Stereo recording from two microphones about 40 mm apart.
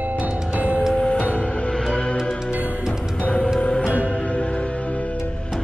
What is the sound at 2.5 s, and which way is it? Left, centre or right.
Music, left.